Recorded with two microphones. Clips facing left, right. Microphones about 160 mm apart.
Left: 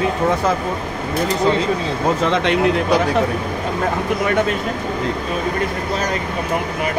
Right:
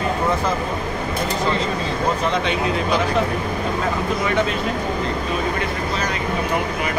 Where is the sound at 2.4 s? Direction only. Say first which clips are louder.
Left 6 dB; 80° left.